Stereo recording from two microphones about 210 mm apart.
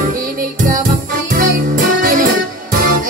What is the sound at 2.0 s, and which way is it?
Music, 40° right (ahead or behind).